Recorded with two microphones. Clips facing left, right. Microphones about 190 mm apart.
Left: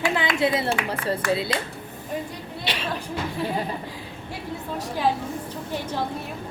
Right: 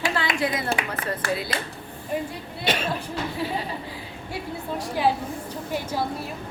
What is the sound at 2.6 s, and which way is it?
Speech, 45° right (ahead or behind).